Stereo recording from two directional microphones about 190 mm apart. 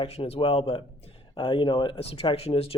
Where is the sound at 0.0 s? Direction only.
30° left (ahead or behind).